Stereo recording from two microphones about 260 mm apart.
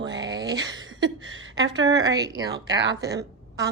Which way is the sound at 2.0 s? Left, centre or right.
Centre.